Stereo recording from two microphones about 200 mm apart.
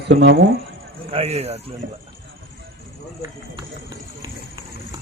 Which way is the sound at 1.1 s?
30° right (ahead or behind).